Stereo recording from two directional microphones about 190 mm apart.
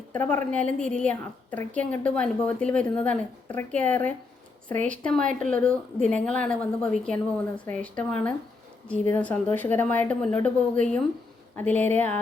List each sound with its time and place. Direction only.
0.1 s a woman's voice: 10° left (ahead or behind)